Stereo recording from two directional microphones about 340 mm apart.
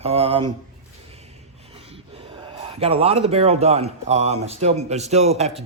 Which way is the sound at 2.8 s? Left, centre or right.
Centre.